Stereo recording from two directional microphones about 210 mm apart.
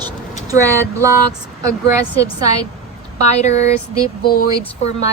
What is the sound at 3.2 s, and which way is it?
Speech, 30° left (ahead or behind).